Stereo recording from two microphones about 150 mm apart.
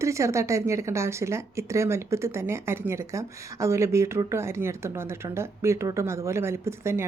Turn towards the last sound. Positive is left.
turn(degrees=-20)  # may be behind; listen again after turning